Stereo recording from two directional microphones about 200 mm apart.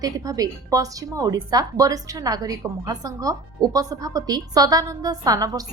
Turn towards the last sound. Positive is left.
turn(degrees=-20)  # may be behind; listen again after turning